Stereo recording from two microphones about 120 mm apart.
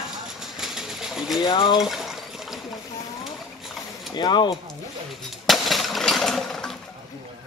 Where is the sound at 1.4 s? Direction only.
35° left (ahead or behind).